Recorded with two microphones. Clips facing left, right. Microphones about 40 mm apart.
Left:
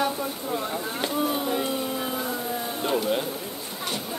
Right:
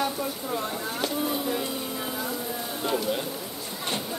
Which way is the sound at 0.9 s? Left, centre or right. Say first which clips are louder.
Left 2 dB; left.